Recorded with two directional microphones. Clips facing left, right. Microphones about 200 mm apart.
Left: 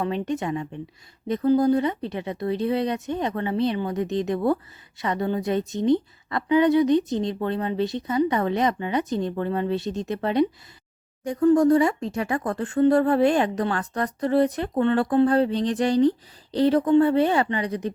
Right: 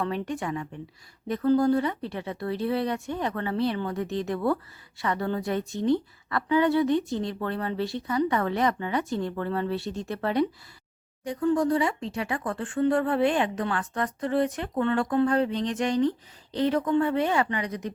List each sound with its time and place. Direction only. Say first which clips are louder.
0.0 s speech: left 4 dB; 20° left (ahead or behind)
11.2 s speech: left 6 dB; 45° left (ahead or behind)